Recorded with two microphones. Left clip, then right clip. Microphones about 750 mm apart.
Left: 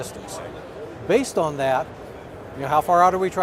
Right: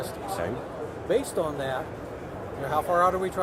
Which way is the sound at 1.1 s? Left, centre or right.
Left.